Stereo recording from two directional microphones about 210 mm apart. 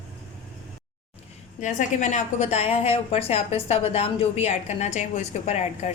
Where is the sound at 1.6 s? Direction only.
35° left (ahead or behind).